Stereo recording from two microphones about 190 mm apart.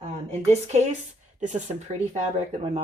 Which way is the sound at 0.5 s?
35° right (ahead or behind).